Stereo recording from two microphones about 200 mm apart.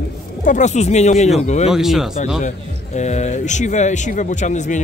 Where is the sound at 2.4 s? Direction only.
35° left (ahead or behind).